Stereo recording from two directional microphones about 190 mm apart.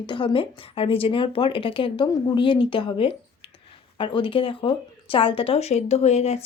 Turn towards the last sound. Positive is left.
turn(degrees=35)  # may be behind; listen again after turning